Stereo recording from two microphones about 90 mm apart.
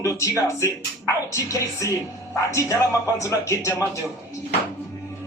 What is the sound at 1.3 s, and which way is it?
Speech, 40° left (ahead or behind).